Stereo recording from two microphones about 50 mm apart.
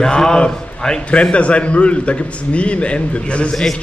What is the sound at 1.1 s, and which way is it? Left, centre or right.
A man's voice, left.